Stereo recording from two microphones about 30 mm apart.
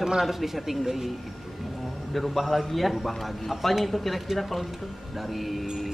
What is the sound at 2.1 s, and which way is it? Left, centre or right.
A man's voice, centre.